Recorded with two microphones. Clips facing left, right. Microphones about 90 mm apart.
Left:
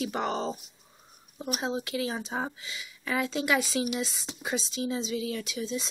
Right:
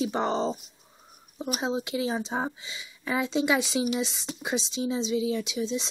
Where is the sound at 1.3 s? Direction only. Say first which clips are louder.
Right 2 dB; 5° right (ahead or behind).